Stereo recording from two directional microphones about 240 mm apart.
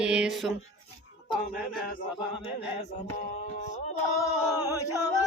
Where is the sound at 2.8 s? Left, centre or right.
Left.